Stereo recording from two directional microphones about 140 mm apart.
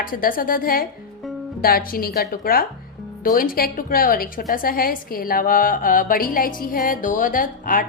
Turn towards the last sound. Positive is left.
turn(degrees=80)